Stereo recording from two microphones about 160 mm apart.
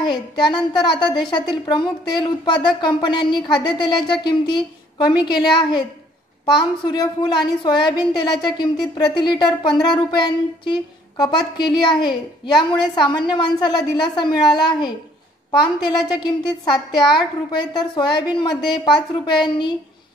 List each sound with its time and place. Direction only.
0.0 s a woman's voice: 30° left (ahead or behind)
16.2 s a woman's voice: 30° left (ahead or behind)